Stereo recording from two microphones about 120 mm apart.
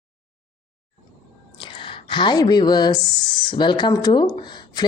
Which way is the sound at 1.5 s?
45° left (ahead or behind).